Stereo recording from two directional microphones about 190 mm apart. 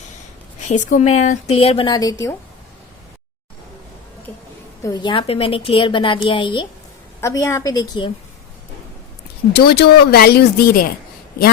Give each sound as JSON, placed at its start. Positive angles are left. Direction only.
{"t": 0.7, "sound": "a woman's voice", "side_deg": 40}
{"t": 4.8, "sound": "a woman's voice", "side_deg": 20}
{"t": 7.2, "sound": "a woman's voice", "side_deg": 15}
{"t": 9.5, "sound": "speech", "side_deg": 60}